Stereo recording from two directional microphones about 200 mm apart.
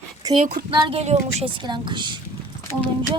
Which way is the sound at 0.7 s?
30° right (ahead or behind).